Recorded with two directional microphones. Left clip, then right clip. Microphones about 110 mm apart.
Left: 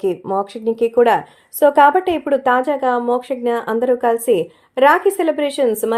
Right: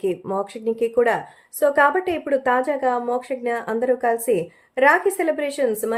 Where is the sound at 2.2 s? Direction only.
15° left (ahead or behind); by 5.9 s 35° left (ahead or behind).